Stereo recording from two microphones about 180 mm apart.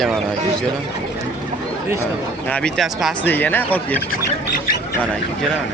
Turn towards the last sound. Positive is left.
turn(degrees=10)  # may be behind; listen again after turning